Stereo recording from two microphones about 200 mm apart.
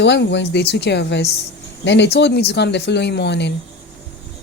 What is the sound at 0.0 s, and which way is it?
Speech, 60° left (ahead or behind).